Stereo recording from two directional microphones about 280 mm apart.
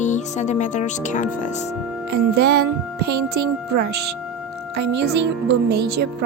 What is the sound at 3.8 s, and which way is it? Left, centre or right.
Speech, right.